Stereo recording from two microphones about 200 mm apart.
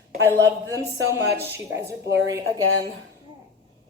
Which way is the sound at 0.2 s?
15° right (ahead or behind).